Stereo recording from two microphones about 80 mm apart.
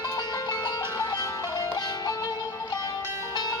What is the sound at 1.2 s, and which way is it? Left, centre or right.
Music, left.